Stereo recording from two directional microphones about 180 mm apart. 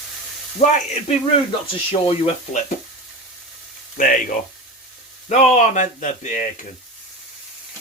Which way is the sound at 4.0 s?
45° left (ahead or behind).